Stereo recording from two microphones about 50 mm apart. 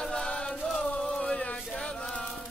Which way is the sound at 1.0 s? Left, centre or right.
Centre.